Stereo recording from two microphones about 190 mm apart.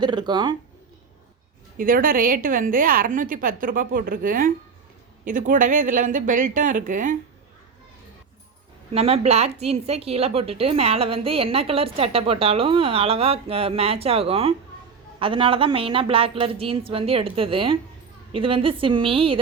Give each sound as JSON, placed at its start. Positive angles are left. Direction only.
{"t": 0.0, "sound": "speech", "side_deg": -25}
{"t": 1.8, "sound": "a woman's voice", "side_deg": -45}
{"t": 8.9, "sound": "a woman's voice", "side_deg": -30}